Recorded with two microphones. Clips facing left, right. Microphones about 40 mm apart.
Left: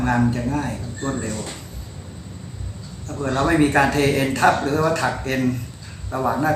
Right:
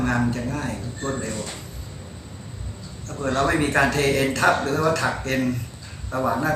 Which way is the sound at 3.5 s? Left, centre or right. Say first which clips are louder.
Left 3 dB; centre.